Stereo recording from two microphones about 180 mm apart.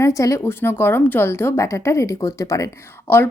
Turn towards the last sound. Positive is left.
turn(degrees=15)  # may be behind; listen again after turning